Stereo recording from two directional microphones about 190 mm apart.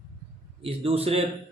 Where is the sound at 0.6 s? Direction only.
30° right (ahead or behind).